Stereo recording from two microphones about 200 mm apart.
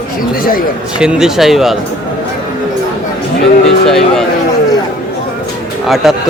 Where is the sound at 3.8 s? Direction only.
Centre (ahead or behind).